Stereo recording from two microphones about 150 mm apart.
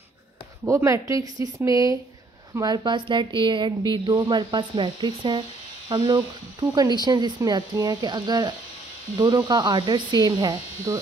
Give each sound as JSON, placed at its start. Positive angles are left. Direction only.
{"t": 0.7, "sound": "a woman's voice", "side_deg": -20}